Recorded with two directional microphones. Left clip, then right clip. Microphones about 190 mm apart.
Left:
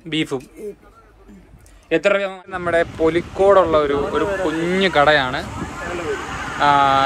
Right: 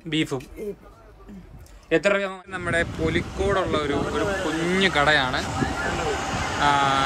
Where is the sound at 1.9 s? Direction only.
Centre (ahead or behind).